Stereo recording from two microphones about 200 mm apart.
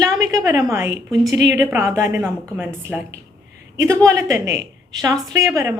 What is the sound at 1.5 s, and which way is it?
A woman's voice, 5° right (ahead or behind).